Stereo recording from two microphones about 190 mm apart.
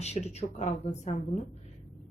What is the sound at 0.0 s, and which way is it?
Speech, 35° left (ahead or behind).